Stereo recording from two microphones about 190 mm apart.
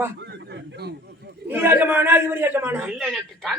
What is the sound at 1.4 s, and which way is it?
A man's voice, 10° right (ahead or behind).